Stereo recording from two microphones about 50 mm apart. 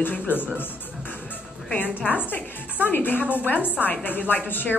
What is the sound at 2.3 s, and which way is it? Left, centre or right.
A woman's voice, left.